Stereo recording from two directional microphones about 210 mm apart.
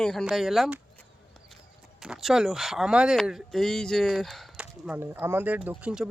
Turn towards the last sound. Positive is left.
turn(degrees=-5)  # may be behind; listen again after turning